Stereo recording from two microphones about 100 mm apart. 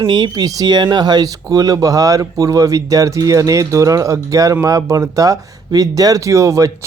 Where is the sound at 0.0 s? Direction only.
50° right (ahead or behind).